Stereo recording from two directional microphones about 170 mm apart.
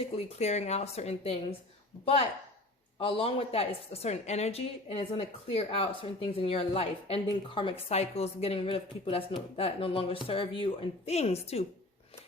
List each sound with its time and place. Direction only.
0.2 s a woman's voice: 40° left (ahead or behind)
3.0 s a woman's voice: 35° left (ahead or behind)